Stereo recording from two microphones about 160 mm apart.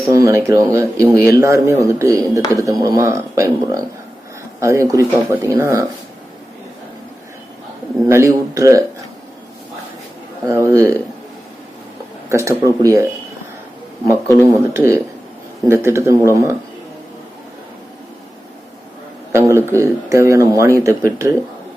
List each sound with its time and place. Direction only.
0.1 s speech: 20° right (ahead or behind)
8.0 s speech: 20° right (ahead or behind)
10.4 s speech: 20° right (ahead or behind)
12.3 s speech: 20° right (ahead or behind)
14.8 s speech: 20° right (ahead or behind)
19.3 s speech: 15° right (ahead or behind)